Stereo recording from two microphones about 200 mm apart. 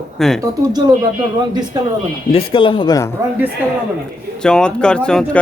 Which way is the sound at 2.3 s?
25° left (ahead or behind).